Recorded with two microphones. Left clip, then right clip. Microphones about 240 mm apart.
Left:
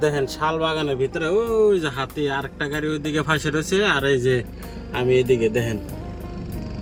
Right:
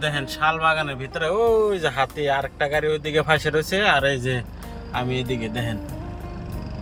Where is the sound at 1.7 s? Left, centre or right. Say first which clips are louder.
Even; centre.